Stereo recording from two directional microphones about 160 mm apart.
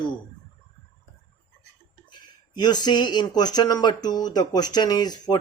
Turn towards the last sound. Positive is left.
turn(degrees=25)  # may be behind; listen again after turning